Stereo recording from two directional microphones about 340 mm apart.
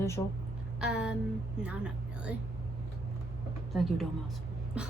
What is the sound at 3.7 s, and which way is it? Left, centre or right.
Speech, centre.